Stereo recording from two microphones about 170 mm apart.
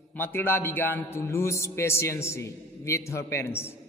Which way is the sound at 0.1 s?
10° left (ahead or behind).